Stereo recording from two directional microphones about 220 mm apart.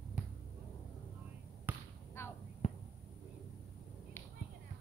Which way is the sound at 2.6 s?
25° left (ahead or behind).